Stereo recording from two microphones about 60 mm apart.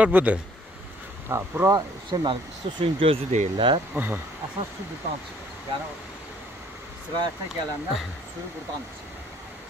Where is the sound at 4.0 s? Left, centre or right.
Right.